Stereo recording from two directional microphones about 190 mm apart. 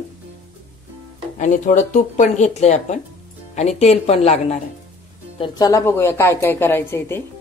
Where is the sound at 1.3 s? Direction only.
40° left (ahead or behind).